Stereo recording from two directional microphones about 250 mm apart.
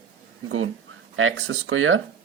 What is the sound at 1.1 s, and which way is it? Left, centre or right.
Speech, right.